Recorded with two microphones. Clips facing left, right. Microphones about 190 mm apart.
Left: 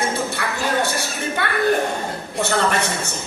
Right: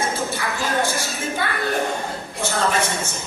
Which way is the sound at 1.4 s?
65° left (ahead or behind).